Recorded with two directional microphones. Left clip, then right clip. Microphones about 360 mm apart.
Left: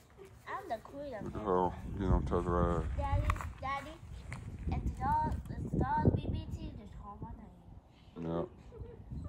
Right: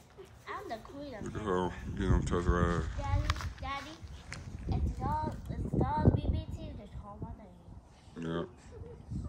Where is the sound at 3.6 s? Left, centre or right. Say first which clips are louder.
Left 2 dB; left.